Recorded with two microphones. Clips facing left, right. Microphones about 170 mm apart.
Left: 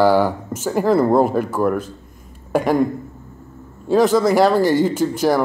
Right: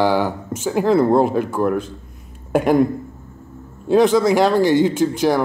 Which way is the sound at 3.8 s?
Centre (ahead or behind).